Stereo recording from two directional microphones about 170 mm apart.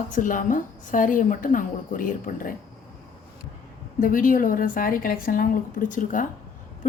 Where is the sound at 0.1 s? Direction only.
50° left (ahead or behind).